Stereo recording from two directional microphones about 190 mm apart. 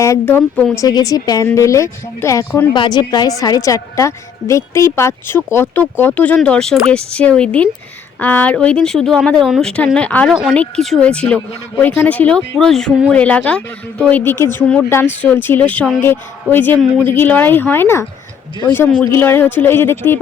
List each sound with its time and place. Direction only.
0.0 s a woman's voice: 15° left (ahead or behind)
2.7 s a woman's voice: 25° left (ahead or behind)